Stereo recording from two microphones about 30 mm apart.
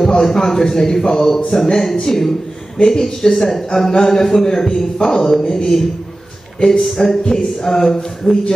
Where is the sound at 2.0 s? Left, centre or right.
Centre.